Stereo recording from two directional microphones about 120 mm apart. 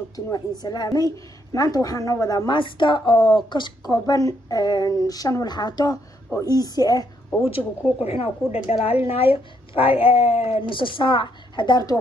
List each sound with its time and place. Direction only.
0.1 s a woman's voice: 35° left (ahead or behind)
7.4 s a woman's voice: 55° left (ahead or behind)
10.3 s speech: 20° right (ahead or behind)
10.7 s a woman's voice: 45° left (ahead or behind)